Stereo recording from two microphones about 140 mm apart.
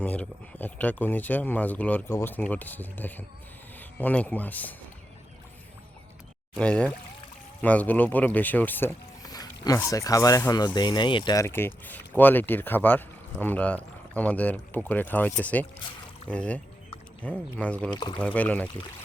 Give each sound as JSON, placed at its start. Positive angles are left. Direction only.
{"t": 0.0, "sound": "speech", "side_deg": 10}
{"t": 6.6, "sound": "speech", "side_deg": 5}
{"t": 9.2, "sound": "speech", "side_deg": 25}
{"t": 11.4, "sound": "speech", "side_deg": 15}
{"t": 17.9, "sound": "speech", "side_deg": 35}
{"t": 18.2, "sound": "speech", "side_deg": 10}